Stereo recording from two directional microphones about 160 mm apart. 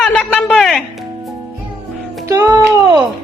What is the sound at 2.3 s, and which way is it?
Music, 20° right (ahead or behind).